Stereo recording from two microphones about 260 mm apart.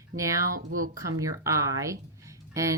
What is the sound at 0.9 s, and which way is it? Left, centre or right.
Speech, centre.